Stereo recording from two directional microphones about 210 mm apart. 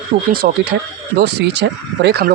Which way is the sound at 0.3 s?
50° right (ahead or behind).